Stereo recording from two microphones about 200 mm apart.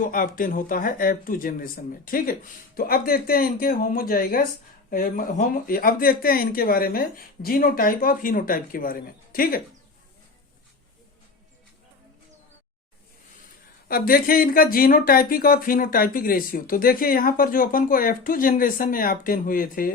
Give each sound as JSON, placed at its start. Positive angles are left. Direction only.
{"t": 0.1, "sound": "speech", "side_deg": 45}
{"t": 13.8, "sound": "speech", "side_deg": 45}